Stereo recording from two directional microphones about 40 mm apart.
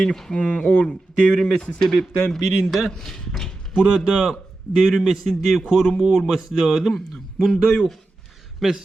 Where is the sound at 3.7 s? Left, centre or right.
Centre.